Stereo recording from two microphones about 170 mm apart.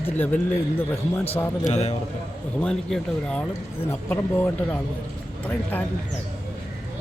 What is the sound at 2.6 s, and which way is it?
Speech, 5° left (ahead or behind).